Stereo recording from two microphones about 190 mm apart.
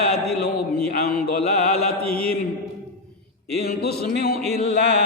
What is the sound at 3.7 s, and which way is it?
Speech, 55° left (ahead or behind).